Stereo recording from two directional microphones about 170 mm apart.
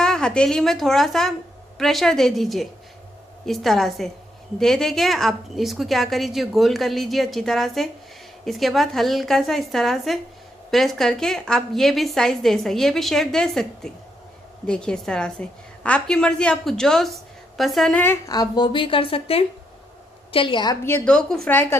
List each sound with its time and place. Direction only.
0.0 s a woman's voice: 5° left (ahead or behind); by 20.7 s 30° left (ahead or behind)
20.8 s a woman's voice: 10° left (ahead or behind)